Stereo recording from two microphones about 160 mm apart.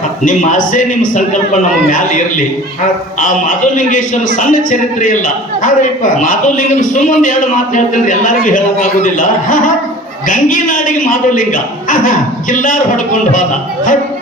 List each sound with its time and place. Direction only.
0.3 s a man's voice: 55° left (ahead or behind)